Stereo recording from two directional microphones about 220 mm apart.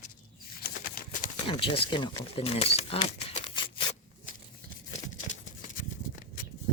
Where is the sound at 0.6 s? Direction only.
45° left (ahead or behind).